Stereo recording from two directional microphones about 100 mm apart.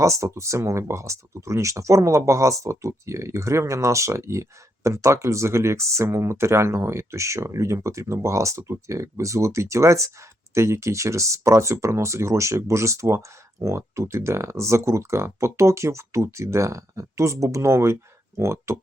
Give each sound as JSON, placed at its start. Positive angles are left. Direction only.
{"t": 0.0, "sound": "speech", "side_deg": -30}